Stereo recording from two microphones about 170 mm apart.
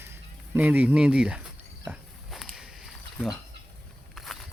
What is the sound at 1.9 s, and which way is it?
Walk, centre (ahead or behind).